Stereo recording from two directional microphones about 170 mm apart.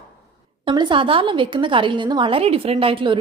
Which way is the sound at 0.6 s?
25° right (ahead or behind).